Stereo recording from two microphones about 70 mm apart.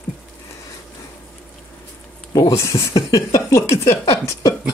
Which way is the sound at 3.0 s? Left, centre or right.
Left.